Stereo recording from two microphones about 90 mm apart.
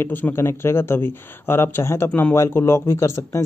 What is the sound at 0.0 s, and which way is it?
Speech, 25° left (ahead or behind).